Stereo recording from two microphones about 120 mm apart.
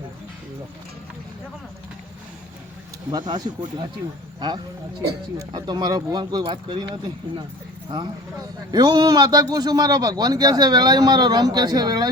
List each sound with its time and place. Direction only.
3.1 s a man's voice: 35° right (ahead or behind)